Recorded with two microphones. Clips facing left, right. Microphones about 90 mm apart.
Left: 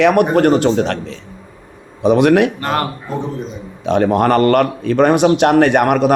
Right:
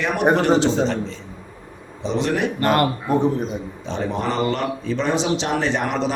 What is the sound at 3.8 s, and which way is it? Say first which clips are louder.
Speech: left 12 dB; 65° left (ahead or behind).